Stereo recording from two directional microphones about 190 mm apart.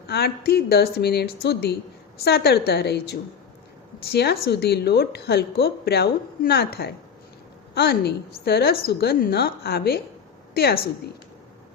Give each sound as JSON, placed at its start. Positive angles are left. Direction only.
{"t": 0.1, "sound": "a woman's voice", "side_deg": 55}